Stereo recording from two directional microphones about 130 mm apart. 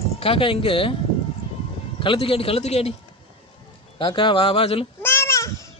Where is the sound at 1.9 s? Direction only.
45° left (ahead or behind).